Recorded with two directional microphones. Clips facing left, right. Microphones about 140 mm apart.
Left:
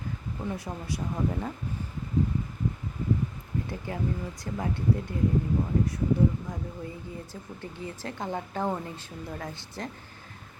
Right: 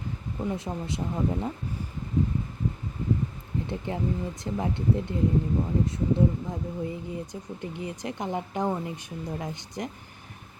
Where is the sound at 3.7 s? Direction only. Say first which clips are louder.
Right 4 dB; 25° right (ahead or behind).